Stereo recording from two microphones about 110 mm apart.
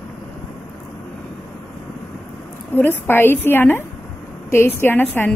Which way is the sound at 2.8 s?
20° left (ahead or behind).